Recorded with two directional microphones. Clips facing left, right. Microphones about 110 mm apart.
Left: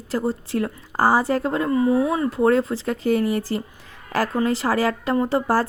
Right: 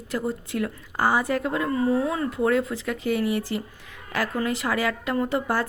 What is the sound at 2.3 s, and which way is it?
A woman's voice, 35° left (ahead or behind).